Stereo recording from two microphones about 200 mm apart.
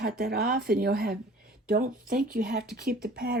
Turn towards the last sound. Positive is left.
turn(degrees=-50)  # may be behind; listen again after turning